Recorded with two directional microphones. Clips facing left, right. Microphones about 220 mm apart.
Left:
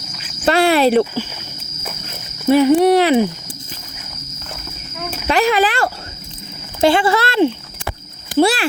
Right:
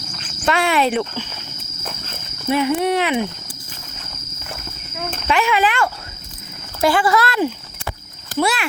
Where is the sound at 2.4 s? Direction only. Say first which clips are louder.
Left 7 dB; 35° left (ahead or behind).